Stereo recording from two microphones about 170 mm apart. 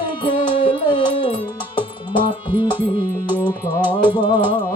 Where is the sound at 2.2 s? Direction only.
10° right (ahead or behind).